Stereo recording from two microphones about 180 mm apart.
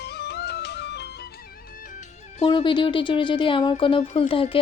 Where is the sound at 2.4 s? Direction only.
25° left (ahead or behind).